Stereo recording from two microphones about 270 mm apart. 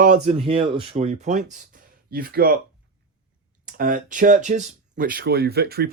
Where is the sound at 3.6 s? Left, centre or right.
Right.